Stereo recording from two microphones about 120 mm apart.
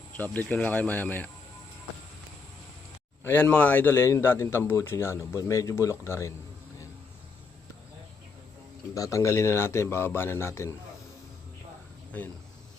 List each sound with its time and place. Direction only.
0.2 s speech: 15° left (ahead or behind)
3.2 s a man's voice: 15° left (ahead or behind)
9.0 s a man's voice: 25° left (ahead or behind)